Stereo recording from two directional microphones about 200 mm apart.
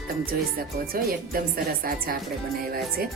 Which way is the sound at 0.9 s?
45° right (ahead or behind).